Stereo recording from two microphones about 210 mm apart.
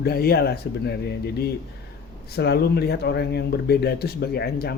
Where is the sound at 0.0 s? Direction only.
45° left (ahead or behind).